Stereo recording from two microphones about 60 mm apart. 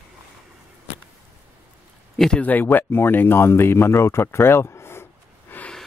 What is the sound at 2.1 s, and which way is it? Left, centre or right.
Speech, centre.